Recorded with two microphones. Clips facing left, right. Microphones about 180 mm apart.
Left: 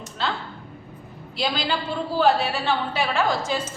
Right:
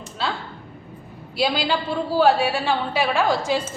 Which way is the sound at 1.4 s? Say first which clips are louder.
Right 4 dB; 10° right (ahead or behind).